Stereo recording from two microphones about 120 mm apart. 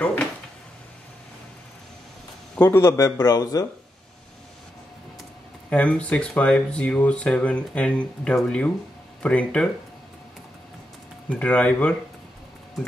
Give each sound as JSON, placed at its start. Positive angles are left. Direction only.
{"t": 2.5, "sound": "speech", "side_deg": 15}
{"t": 5.7, "sound": "speech", "side_deg": 10}
{"t": 11.2, "sound": "speech", "side_deg": 10}